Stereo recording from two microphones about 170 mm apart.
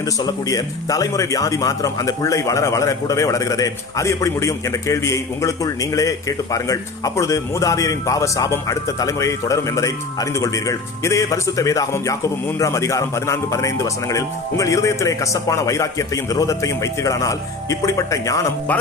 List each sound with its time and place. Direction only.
0.2 s speech: 20° left (ahead or behind)